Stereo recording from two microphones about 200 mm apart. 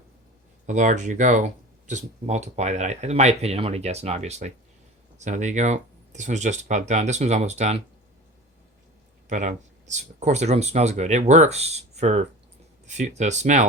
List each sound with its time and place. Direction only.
0.7 s speech: 35° right (ahead or behind)
9.3 s speech: 40° right (ahead or behind)